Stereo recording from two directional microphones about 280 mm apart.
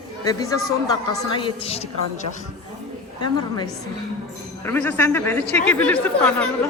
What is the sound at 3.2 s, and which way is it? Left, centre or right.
A man's voice, centre.